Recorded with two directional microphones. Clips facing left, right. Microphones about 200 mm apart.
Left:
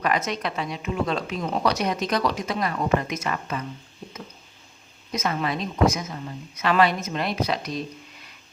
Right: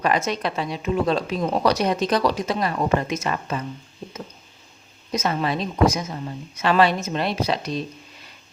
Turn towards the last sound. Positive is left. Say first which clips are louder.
# right 2 dB
turn(degrees=-30)  # may be behind; listen again after turning